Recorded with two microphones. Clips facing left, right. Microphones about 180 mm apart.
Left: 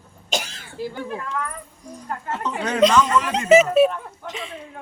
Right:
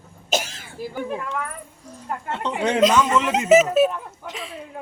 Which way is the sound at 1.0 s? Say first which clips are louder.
Right 2 dB; 10° right (ahead or behind).